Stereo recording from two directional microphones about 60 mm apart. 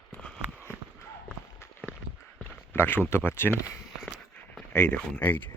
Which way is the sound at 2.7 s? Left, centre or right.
Left.